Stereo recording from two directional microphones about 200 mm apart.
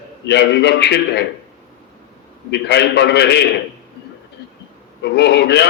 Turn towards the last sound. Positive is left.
turn(degrees=55)  # may be behind; listen again after turning